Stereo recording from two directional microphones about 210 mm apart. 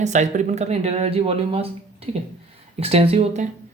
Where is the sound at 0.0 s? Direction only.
35° right (ahead or behind).